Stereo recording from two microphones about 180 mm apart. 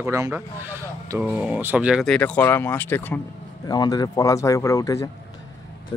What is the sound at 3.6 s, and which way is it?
Speech, 20° left (ahead or behind).